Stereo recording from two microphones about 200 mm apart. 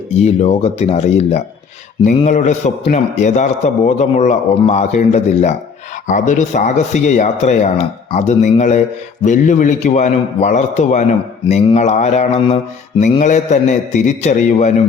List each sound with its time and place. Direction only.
0.2 s speech: 35° left (ahead or behind)